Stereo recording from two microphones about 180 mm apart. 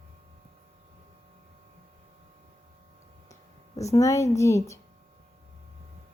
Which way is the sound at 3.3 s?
20° left (ahead or behind).